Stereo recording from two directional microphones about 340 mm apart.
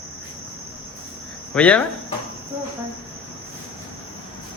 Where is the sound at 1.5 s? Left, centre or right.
Centre.